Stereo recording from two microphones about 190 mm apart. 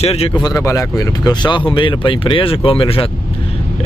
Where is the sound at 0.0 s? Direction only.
30° left (ahead or behind).